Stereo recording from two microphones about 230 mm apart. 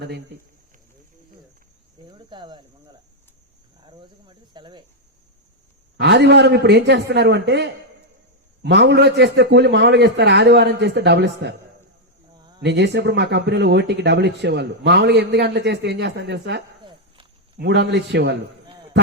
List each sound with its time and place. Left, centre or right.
2.0 s cricket: right
6.0 s speech: right
12.4 s a sound: centre
12.6 s speech: right